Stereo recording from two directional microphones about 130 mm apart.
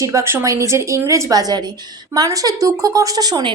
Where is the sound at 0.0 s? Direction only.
25° right (ahead or behind).